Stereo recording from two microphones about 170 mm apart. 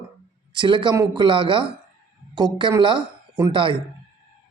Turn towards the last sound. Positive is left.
turn(degrees=-30)  # may be behind; listen again after turning